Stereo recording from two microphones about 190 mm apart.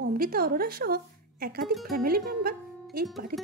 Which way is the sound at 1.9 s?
50° right (ahead or behind).